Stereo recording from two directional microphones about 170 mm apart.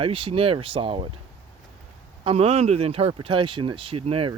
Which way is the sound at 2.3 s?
40° right (ahead or behind).